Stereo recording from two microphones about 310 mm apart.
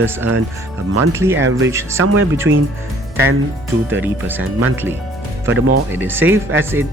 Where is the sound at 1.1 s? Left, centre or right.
Centre.